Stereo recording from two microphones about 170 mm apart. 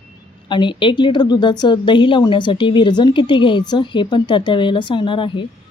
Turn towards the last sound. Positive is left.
turn(degrees=30)  # may be behind; listen again after turning